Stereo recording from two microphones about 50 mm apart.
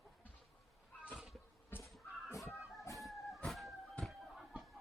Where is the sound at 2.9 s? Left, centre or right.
Centre.